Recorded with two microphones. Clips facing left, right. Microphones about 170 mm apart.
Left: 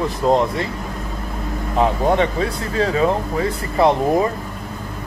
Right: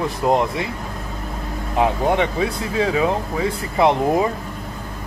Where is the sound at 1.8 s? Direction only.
15° right (ahead or behind).